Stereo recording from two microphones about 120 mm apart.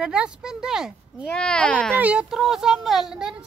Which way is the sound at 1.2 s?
10° left (ahead or behind).